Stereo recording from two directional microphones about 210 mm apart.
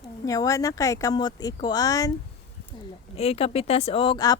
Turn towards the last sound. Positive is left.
turn(degrees=20)  # may be behind; listen again after turning